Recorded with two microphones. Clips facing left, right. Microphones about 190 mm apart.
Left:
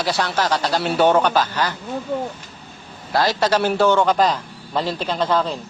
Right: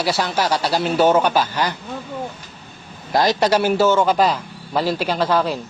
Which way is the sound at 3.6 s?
5° right (ahead or behind).